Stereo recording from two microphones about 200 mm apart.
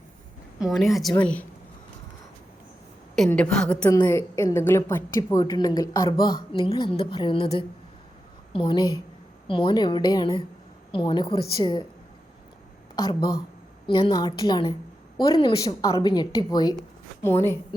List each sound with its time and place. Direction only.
0.6 s a woman's voice: centre (ahead or behind)
3.2 s a woman's voice: 5° left (ahead or behind); by 7.4 s 25° left (ahead or behind)
8.5 s a woman's voice: 25° left (ahead or behind)
13.0 s a woman's voice: 20° left (ahead or behind)